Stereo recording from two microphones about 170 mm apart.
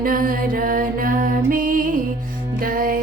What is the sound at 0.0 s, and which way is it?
Music, 55° right (ahead or behind).